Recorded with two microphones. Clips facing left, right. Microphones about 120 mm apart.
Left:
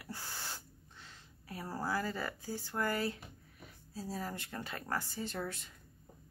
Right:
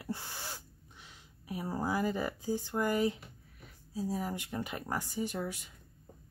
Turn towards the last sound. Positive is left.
turn(degrees=-10)  # may be behind; listen again after turning